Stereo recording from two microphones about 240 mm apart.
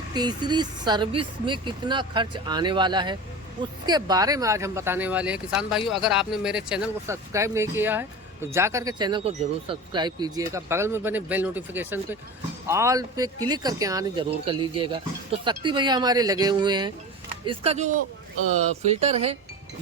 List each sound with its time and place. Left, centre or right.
0.1 s speech: centre